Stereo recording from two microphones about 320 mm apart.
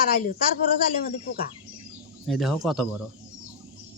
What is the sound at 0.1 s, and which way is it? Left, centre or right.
A man's voice, left.